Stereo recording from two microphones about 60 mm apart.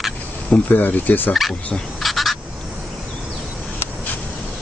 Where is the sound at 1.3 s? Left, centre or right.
Centre.